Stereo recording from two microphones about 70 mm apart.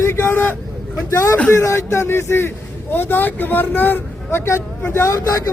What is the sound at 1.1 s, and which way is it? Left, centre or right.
A man's voice, left.